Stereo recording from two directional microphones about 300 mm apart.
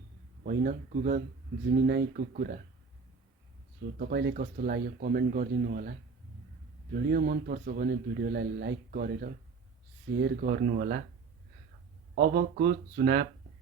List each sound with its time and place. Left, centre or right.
0.4 s speech: right
3.9 s speech: right
6.9 s speech: right
12.1 s speech: right